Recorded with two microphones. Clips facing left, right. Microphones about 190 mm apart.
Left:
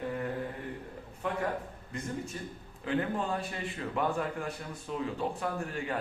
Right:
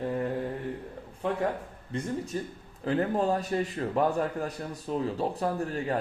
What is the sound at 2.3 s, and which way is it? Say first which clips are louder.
Speech: right 7 dB; 35° right (ahead or behind).